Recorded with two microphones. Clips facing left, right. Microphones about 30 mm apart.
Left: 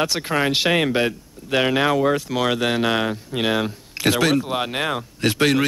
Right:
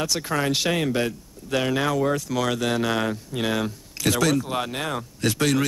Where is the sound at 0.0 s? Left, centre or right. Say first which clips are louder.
Left 4 dB; left.